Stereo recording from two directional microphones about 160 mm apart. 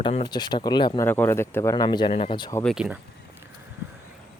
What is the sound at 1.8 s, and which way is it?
Speech, 30° left (ahead or behind).